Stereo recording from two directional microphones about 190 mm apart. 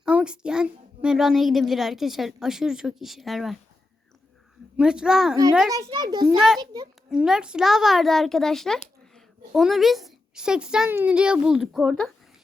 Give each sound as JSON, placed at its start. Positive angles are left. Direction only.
{"t": 0.0, "sound": "a child's voice", "side_deg": -5}
{"t": 4.8, "sound": "a child's voice", "side_deg": -5}
{"t": 5.7, "sound": "a child's voice", "side_deg": -20}
{"t": 6.2, "sound": "a child's voice", "side_deg": -5}